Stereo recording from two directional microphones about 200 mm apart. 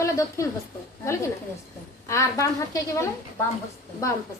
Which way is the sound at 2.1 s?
15° left (ahead or behind).